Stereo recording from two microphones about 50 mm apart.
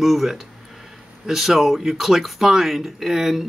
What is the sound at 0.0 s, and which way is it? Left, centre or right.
Speech, centre.